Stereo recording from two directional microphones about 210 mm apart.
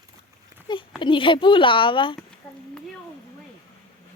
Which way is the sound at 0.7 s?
20° left (ahead or behind).